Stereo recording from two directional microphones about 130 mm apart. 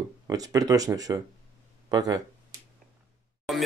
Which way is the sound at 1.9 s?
30° right (ahead or behind).